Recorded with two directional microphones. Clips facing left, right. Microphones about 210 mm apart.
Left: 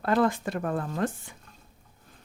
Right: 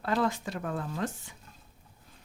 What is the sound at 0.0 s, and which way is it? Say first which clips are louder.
Speech: left 5 dB; 55° left (ahead or behind).